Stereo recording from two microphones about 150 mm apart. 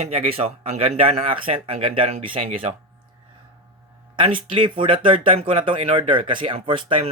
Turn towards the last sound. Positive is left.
turn(degrees=-35)  # may be behind; listen again after turning